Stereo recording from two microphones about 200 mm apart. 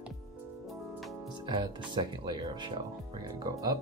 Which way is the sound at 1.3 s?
20° right (ahead or behind).